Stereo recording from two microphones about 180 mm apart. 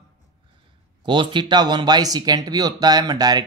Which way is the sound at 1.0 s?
25° right (ahead or behind).